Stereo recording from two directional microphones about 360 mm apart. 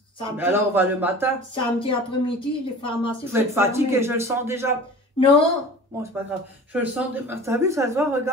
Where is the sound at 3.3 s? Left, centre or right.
Centre.